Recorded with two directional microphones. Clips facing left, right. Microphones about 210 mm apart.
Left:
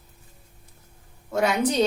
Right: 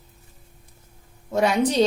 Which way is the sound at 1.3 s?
30° right (ahead or behind).